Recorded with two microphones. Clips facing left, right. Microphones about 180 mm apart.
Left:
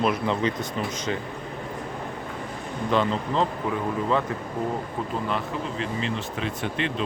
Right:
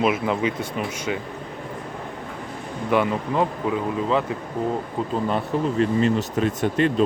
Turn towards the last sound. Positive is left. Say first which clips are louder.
# right 8 dB
turn(degrees=-45)  # may be behind; listen again after turning